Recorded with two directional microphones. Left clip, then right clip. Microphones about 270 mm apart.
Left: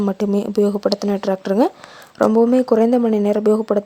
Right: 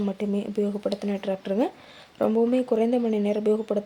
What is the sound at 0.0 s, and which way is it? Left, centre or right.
Speech, left.